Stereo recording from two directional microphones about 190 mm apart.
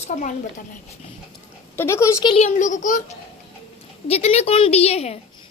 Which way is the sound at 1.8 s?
15° left (ahead or behind).